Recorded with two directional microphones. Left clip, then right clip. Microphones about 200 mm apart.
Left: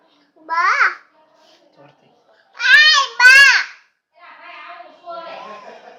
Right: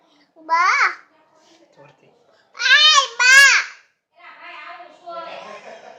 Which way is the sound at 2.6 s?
15° right (ahead or behind).